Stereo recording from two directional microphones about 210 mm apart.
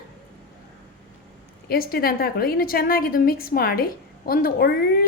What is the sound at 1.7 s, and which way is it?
A woman's voice, 45° left (ahead or behind).